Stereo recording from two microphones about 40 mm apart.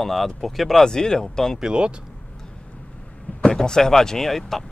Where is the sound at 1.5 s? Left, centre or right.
Right.